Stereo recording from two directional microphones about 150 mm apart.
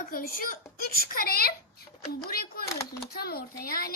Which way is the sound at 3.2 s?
90° left.